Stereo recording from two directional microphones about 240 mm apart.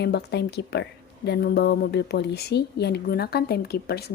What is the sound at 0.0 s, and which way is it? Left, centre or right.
Speech, left.